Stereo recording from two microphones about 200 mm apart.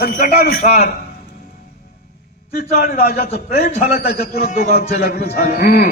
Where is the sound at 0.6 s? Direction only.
35° left (ahead or behind).